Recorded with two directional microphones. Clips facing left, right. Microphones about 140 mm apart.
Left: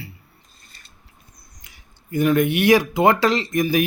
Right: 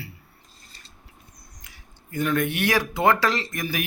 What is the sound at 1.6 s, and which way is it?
Speech, 15° left (ahead or behind).